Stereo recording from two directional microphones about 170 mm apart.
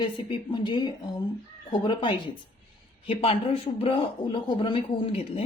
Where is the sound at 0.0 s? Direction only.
30° left (ahead or behind).